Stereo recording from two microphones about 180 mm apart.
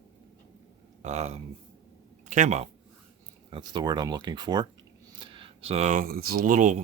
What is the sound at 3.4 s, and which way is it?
Speech, 25° right (ahead or behind).